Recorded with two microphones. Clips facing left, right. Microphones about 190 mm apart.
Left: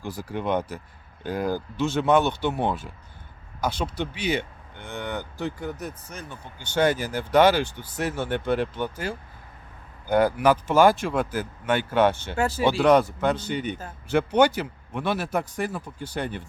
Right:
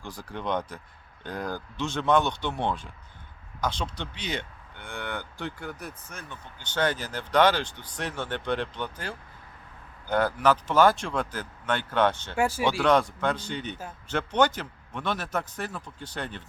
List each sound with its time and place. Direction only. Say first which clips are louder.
0.0 s speech: left 5 dB; 5° left (ahead or behind)
12.4 s speech: even; 10° right (ahead or behind)
12.8 s speech: left 4 dB; 10° left (ahead or behind)